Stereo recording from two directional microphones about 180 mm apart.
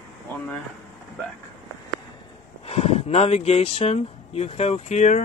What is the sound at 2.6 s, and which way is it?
Speech, 35° left (ahead or behind).